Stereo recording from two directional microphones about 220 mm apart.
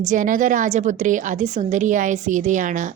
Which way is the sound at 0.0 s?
35° right (ahead or behind).